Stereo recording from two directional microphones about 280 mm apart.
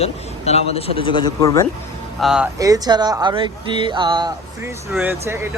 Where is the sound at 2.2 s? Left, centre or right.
Centre.